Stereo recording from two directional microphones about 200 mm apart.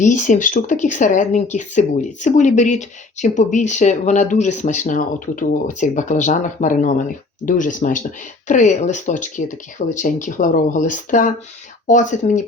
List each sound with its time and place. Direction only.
0.0 s speech: 40° left (ahead or behind)